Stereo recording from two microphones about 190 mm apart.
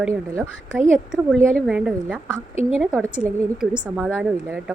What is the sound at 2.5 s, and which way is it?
Speech, 35° left (ahead or behind).